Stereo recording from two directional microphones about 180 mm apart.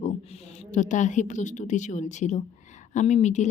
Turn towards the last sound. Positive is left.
turn(degrees=40)  # may be behind; listen again after turning